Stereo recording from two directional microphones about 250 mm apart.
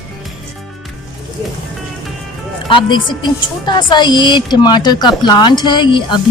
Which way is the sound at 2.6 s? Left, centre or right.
Centre.